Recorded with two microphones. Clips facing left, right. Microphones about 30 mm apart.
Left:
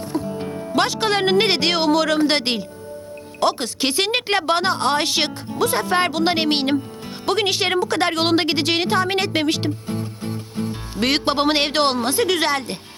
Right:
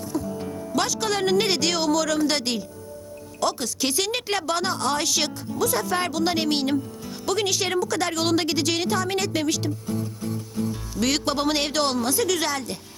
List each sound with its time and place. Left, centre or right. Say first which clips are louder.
0.1 s a woman's voice: left 3 dB; left